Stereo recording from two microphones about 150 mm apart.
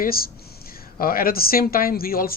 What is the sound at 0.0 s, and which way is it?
Speech, 80° left.